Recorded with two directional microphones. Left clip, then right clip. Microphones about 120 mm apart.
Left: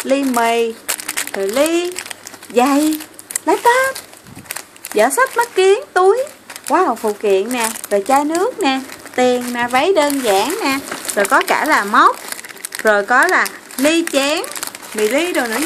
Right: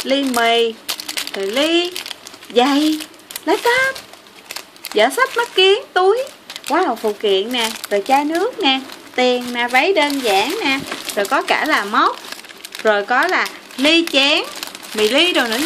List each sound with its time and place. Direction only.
0.0 s speech: 5° left (ahead or behind)
4.9 s speech: 10° left (ahead or behind)
13.2 s speech: 5° left (ahead or behind)
15.0 s speech: 15° right (ahead or behind)